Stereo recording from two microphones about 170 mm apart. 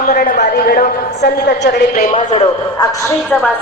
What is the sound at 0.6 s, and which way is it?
A woman's voice, 60° left (ahead or behind).